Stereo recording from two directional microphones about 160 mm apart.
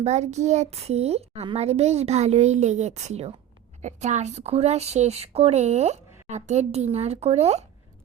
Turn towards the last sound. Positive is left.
turn(degrees=-45)  # may be behind; listen again after turning